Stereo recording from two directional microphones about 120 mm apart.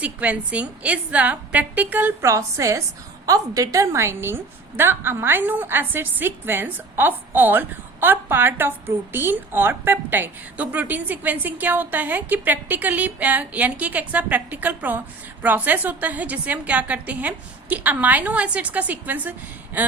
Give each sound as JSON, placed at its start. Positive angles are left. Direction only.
{"t": 0.0, "sound": "a woman's voice", "side_deg": -10}
{"t": 2.2, "sound": "a woman's voice", "side_deg": -25}